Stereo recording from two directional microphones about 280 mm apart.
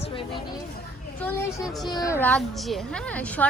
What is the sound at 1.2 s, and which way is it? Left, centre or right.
A woman's voice, centre.